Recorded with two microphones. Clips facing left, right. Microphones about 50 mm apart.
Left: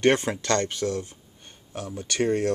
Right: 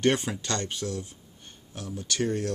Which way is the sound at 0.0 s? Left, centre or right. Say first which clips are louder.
Left 4 dB; left.